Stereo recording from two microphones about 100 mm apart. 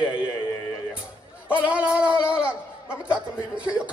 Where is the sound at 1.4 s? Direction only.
15° right (ahead or behind).